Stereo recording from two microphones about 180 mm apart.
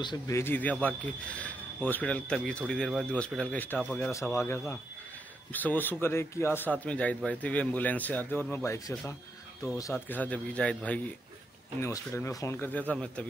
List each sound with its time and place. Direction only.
0.0 s a man's voice: 25° left (ahead or behind)
0.4 s speech: 10° left (ahead or behind)